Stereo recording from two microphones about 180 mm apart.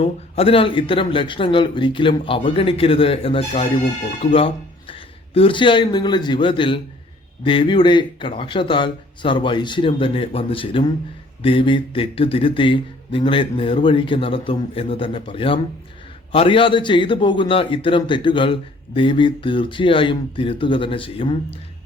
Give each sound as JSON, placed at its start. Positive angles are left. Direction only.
{"t": 0.0, "sound": "speech", "side_deg": 30}